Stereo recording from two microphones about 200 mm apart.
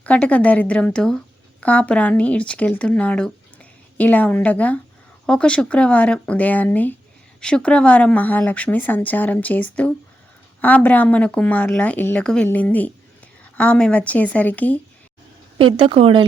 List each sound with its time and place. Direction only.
0.0 s speech: 5° left (ahead or behind)
15.5 s speech: 25° right (ahead or behind)